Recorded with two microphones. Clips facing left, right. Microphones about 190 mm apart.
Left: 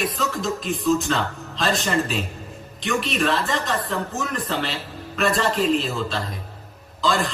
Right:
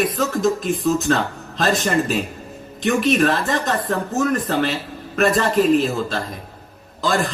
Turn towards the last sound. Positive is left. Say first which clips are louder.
# right 2 dB
turn(degrees=-50)  # may be behind; listen again after turning